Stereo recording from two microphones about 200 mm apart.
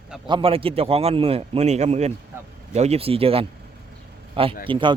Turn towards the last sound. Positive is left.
turn(degrees=-25)  # may be behind; listen again after turning